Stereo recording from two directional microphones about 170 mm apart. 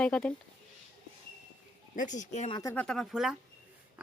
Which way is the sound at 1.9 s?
45° left (ahead or behind).